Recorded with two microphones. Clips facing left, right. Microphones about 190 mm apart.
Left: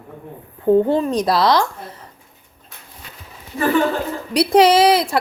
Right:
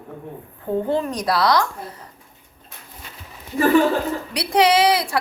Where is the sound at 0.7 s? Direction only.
85° left.